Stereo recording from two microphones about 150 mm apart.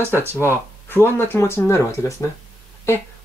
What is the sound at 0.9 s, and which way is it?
Speech, 15° left (ahead or behind).